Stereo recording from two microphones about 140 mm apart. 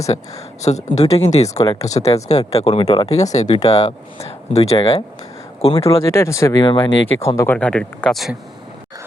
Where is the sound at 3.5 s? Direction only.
25° left (ahead or behind).